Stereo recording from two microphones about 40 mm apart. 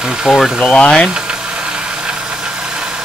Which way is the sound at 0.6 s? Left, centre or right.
Left.